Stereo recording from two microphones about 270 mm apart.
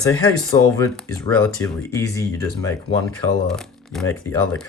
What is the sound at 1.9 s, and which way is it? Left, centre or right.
Speech, centre.